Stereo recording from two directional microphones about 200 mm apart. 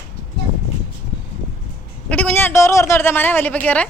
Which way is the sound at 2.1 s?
5° left (ahead or behind).